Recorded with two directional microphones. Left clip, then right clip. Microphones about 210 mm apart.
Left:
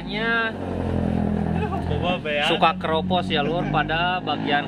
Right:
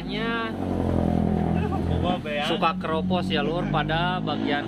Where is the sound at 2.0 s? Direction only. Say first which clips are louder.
Left 5 dB; 45° left (ahead or behind).